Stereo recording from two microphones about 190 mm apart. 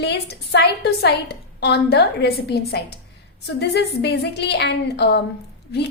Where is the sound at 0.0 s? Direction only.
60° left (ahead or behind).